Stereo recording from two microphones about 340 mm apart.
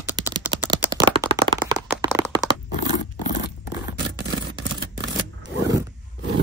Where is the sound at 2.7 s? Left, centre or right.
Left.